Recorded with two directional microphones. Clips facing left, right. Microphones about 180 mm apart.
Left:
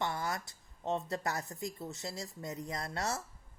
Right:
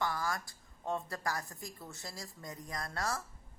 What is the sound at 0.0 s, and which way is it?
A woman's voice, 25° left (ahead or behind).